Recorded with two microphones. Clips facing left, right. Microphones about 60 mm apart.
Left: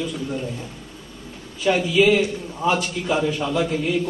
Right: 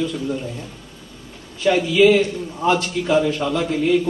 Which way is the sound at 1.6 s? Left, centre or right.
Centre.